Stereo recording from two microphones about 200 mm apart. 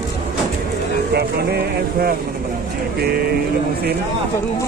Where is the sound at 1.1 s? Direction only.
50° right (ahead or behind).